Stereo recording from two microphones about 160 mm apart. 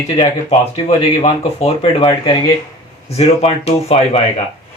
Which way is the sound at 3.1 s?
40° left (ahead or behind).